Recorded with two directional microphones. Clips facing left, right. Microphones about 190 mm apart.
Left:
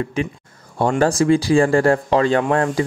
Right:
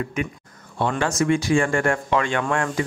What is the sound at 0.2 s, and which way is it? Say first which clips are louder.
Speech: left 4 dB; 30° left (ahead or behind).